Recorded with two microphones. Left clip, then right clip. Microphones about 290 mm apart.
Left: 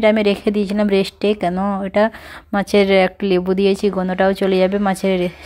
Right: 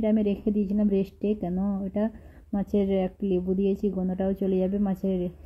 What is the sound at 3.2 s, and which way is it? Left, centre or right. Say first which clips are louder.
A woman's voice: left 11 dB; left.